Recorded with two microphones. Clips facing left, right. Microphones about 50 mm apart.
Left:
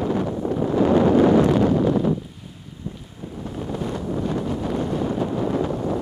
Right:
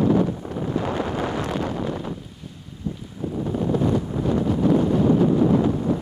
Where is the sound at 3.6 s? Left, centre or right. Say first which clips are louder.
Right 5 dB; centre.